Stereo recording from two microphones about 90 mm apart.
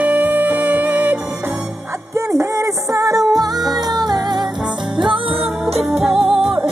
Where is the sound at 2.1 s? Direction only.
35° right (ahead or behind); by 4.5 s 50° right (ahead or behind).